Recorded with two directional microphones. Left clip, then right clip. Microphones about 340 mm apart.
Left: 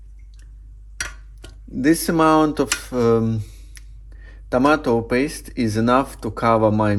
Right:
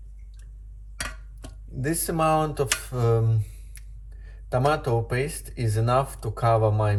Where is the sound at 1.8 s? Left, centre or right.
Left.